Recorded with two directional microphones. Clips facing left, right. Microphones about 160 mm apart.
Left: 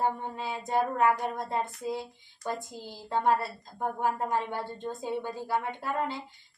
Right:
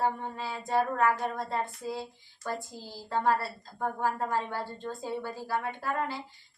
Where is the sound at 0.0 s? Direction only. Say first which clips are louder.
Even; 20° left (ahead or behind).